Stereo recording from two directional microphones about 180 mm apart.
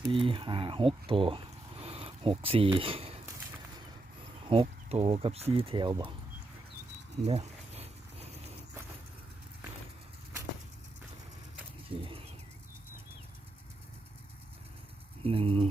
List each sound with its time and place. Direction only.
0.1 s speech: 30° right (ahead or behind)
4.4 s speech: 30° right (ahead or behind)
7.3 s a sound: 35° right (ahead or behind)
11.9 s speech: 30° right (ahead or behind)
15.2 s speech: 30° right (ahead or behind)